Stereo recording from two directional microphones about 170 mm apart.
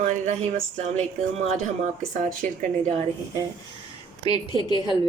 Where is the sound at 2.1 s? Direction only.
50° right (ahead or behind).